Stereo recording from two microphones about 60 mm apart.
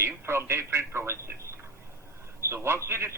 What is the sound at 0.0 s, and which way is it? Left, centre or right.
A man's voice, right.